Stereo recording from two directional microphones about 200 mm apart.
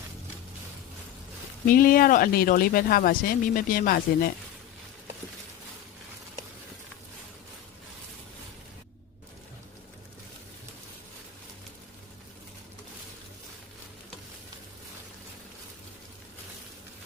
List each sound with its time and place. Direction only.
1.6 s speech: 45° left (ahead or behind)